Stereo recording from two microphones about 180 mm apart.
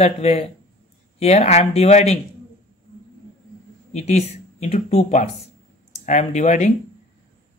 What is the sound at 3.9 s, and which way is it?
Speech, 35° left (ahead or behind).